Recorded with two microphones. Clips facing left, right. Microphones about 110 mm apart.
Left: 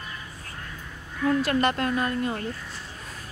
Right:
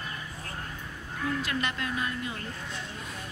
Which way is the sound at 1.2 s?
45° left (ahead or behind).